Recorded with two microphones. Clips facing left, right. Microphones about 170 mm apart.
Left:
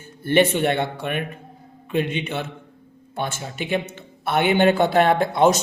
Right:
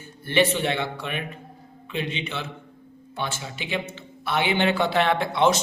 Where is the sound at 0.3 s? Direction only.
50° left (ahead or behind).